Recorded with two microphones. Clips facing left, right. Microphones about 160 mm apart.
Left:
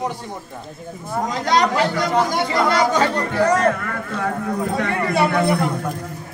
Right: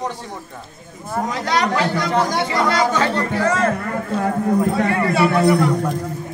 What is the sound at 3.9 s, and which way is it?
Speech, 35° right (ahead or behind).